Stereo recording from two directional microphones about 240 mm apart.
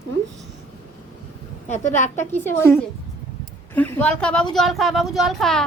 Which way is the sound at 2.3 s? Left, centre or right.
Centre.